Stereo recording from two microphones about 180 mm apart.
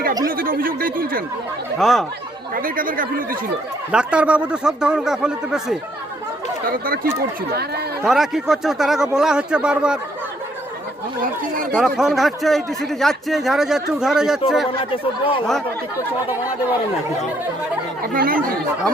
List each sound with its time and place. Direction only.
0.3 s speech: 55° right (ahead or behind)
1.8 s speech: centre (ahead or behind)
2.6 s speech: 50° right (ahead or behind)
3.9 s speech: 5° right (ahead or behind)
6.7 s speech: 55° right (ahead or behind)
8.0 s speech: centre (ahead or behind)
11.7 s speech: 5° right (ahead or behind)
14.8 s speech: 30° left (ahead or behind)
18.0 s speech: 50° right (ahead or behind)